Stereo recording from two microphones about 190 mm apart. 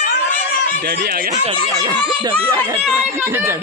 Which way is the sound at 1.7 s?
20° right (ahead or behind).